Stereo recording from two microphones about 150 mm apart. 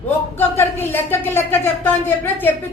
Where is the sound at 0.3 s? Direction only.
15° left (ahead or behind).